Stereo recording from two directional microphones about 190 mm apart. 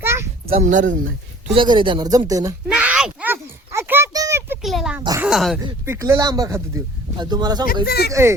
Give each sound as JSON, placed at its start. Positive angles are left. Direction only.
{"t": 0.0, "sound": "a sound", "side_deg": -15}
{"t": 0.4, "sound": "speech", "side_deg": -35}
{"t": 1.5, "sound": "speech", "side_deg": -25}
{"t": 2.6, "sound": "a sound", "side_deg": -5}
{"t": 4.6, "sound": "oink", "side_deg": 0}
{"t": 5.2, "sound": "speech", "side_deg": 0}
{"t": 5.8, "sound": "speech", "side_deg": -15}
{"t": 7.9, "sound": "speech", "side_deg": 55}
{"t": 8.1, "sound": "speech", "side_deg": -15}